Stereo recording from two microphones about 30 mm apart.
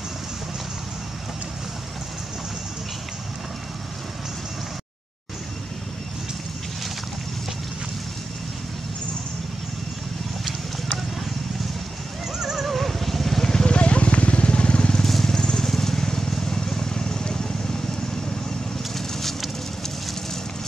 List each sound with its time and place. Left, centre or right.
12.4 s neigh: centre
12.6 s music: centre
13.4 s vehicle: left
13.7 s vehicle: left
15.0 s vehicle: centre
15.3 s vehicle: centre